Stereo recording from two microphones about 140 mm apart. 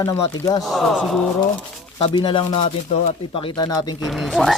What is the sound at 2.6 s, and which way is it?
Speech, 50° left (ahead or behind).